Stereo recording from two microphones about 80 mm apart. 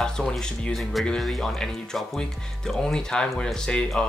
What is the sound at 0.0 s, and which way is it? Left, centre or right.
Speech, centre.